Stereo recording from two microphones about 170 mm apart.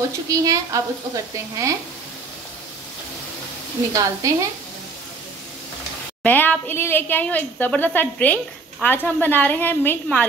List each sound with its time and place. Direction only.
0.3 s speech: 20° right (ahead or behind)
3.9 s speech: 20° right (ahead or behind)
6.2 s a woman's voice: 10° left (ahead or behind)